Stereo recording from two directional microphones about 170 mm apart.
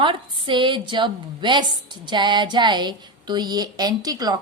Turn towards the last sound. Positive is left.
turn(degrees=-20)  # may be behind; listen again after turning